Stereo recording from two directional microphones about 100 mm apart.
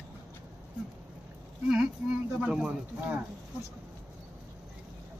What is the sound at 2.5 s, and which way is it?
Speech, 10° right (ahead or behind).